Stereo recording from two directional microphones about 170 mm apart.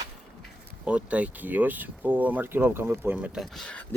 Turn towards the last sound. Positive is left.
turn(degrees=5)  # may be behind; listen again after turning